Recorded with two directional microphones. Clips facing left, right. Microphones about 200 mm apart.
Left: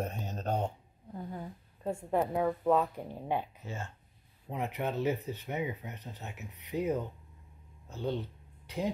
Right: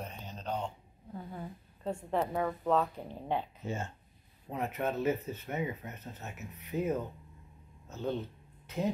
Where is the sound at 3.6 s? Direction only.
20° right (ahead or behind).